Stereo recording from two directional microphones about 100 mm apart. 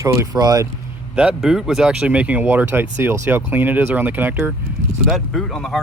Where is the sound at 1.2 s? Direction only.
5° right (ahead or behind).